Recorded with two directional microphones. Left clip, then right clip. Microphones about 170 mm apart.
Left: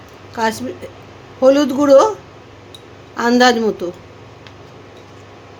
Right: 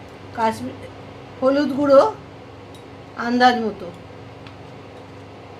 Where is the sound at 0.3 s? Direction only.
90° left.